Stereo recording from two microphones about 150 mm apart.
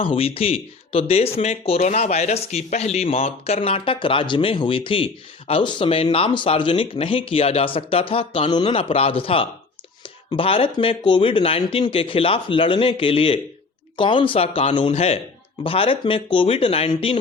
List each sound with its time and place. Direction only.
0.0 s speech: 35° left (ahead or behind)